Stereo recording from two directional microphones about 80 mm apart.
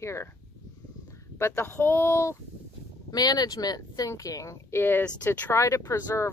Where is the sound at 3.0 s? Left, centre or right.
Left.